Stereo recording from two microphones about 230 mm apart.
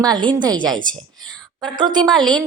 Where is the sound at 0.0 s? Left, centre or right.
Centre.